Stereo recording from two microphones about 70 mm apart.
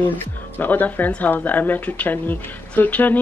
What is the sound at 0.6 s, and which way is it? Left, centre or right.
Speech, left.